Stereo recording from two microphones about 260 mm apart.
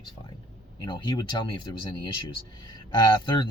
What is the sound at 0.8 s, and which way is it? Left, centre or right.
Speech, centre.